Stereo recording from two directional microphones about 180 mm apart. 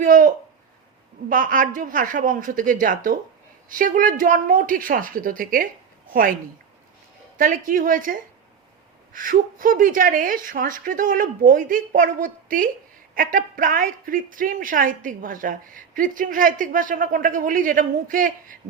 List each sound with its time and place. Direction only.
0.0 s speech: 50° right (ahead or behind)
7.3 s speech: 50° right (ahead or behind)